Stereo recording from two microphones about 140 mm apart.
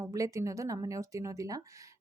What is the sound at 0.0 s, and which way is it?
A woman's voice, 25° right (ahead or behind).